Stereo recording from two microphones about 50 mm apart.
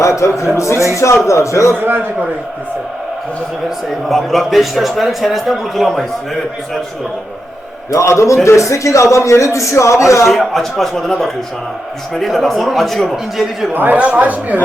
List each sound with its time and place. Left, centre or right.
0.0 s speech: left
0.5 s a man's voice: left
1.7 s a man's voice: right
4.1 s a man's voice: centre
7.9 s a man's voice: left
8.4 s speech: left
10.2 s a man's voice: centre
13.7 s speech: right
14.0 s speech: right